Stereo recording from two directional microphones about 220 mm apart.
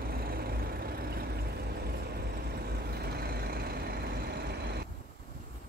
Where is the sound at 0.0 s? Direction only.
40° right (ahead or behind).